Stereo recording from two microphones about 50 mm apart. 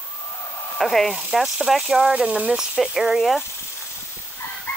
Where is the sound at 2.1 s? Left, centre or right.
Right.